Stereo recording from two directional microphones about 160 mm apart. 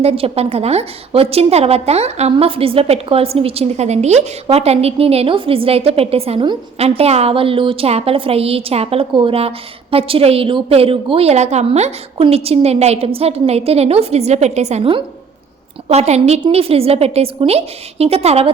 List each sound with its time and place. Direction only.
0.0 s a woman's voice: 40° right (ahead or behind)